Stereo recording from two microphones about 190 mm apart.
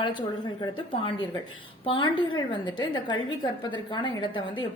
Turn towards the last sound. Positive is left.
turn(degrees=25)  # may be behind; listen again after turning